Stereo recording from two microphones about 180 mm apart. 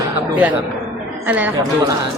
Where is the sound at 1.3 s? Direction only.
10° right (ahead or behind).